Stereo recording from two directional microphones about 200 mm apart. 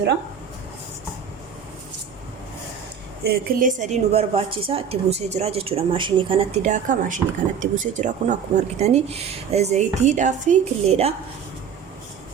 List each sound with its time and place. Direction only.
3.2 s a woman's voice: 45° right (ahead or behind)